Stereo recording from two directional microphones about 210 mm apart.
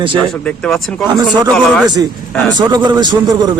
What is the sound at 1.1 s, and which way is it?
Speech, 20° right (ahead or behind).